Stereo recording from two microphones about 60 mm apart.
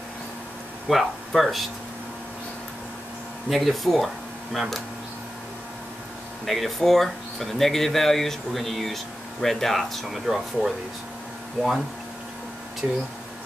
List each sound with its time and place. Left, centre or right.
0.8 s speech: centre
3.4 s speech: centre
6.4 s speech: centre
12.8 s speech: right